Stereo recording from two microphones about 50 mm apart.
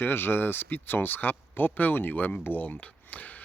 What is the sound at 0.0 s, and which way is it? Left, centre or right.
Speech, left.